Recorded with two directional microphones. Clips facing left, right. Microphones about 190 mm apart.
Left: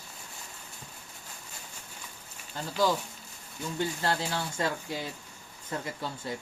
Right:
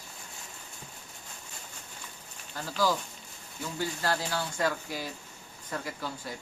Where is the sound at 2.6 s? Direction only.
25° left (ahead or behind).